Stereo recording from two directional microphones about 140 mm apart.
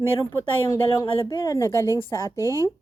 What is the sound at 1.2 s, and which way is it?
Speech, 35° left (ahead or behind).